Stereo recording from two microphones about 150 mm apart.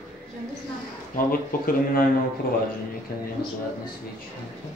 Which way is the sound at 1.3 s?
75° left (ahead or behind).